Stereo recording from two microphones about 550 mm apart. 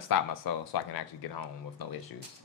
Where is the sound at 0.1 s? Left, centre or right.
Left.